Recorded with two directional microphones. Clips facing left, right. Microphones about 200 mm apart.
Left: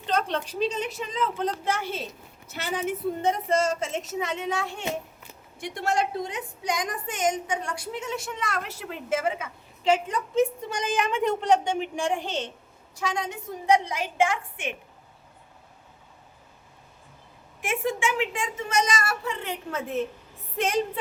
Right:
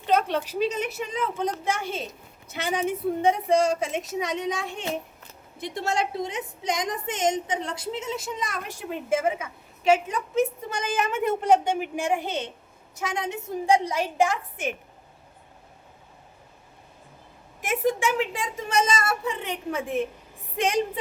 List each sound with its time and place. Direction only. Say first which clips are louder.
0.0 s a woman's voice: right 4 dB; 10° right (ahead or behind)
13.0 s a woman's voice: even; 20° right (ahead or behind); by 14.8 s 40° right (ahead or behind)
17.6 s a woman's voice: right 3 dB; 40° right (ahead or behind); by 20.8 s 15° right (ahead or behind)